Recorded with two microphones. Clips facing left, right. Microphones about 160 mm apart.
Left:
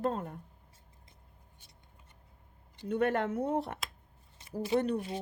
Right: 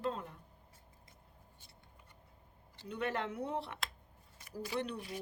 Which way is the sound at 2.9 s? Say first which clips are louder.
Left 8 dB; 50° left (ahead or behind).